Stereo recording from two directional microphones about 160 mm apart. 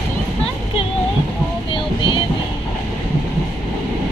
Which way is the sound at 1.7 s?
30° left (ahead or behind).